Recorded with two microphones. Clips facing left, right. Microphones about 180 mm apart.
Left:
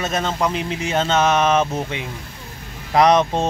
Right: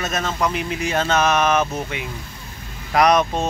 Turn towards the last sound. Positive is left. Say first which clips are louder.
# left 2 dB
turn(degrees=25)  # may be behind; listen again after turning